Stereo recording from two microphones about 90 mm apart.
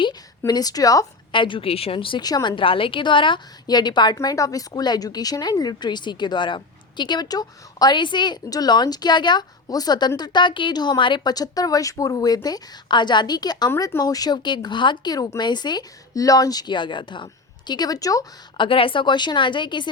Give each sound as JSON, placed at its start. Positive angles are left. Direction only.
{"t": 0.0, "sound": "a sound", "side_deg": 50}
{"t": 1.3, "sound": "speech", "side_deg": 65}
{"t": 2.2, "sound": "a woman's voice", "side_deg": 50}
{"t": 17.7, "sound": "a woman's voice", "side_deg": 45}
{"t": 18.5, "sound": "a woman's voice", "side_deg": 70}